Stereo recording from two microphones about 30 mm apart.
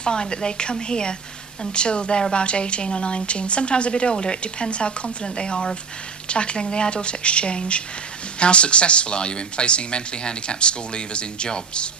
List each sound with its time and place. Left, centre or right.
0.0 s a woman's voice: left